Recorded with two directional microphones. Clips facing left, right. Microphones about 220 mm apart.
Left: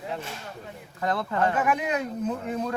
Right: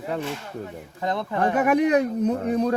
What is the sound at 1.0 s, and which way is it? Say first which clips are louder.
Speech: right 1 dB; 20° right (ahead or behind).